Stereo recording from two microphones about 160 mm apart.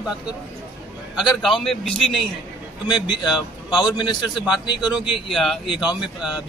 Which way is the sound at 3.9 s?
25° left (ahead or behind).